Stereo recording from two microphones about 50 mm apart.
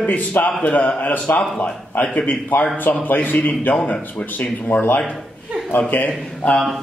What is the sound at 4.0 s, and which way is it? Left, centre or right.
Speech, left.